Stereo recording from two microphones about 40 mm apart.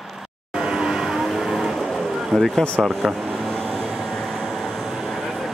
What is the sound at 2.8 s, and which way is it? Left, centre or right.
Speech, centre.